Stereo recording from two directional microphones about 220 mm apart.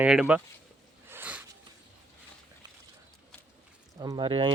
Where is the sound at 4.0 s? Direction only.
20° right (ahead or behind).